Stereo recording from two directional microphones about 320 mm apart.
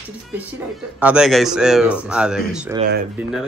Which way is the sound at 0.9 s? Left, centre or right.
Centre.